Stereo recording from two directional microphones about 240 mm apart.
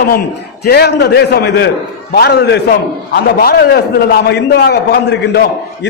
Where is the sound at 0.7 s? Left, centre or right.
Left.